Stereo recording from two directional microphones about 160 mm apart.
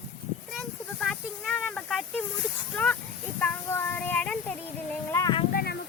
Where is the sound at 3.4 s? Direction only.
15° left (ahead or behind).